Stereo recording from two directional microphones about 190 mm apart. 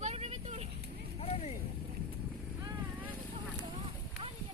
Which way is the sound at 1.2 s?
30° left (ahead or behind).